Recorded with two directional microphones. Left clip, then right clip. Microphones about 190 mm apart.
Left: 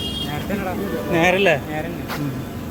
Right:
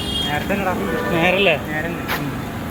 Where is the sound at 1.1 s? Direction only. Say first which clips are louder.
Even; 40° left (ahead or behind).